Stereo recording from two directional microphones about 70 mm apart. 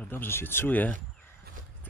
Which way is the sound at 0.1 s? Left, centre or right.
Left.